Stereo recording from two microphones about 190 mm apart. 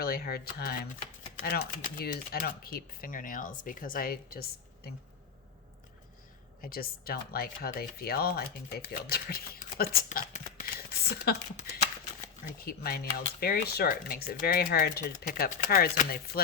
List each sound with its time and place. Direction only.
0.0 s speech: 55° left (ahead or behind)
6.6 s speech: 50° left (ahead or behind)
12.5 s speech: 50° left (ahead or behind)